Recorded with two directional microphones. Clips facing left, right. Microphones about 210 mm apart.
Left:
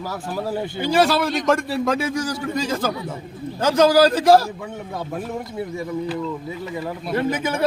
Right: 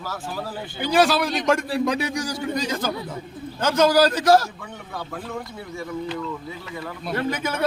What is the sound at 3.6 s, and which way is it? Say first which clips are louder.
A man's voice: left 3 dB; 30° left (ahead or behind).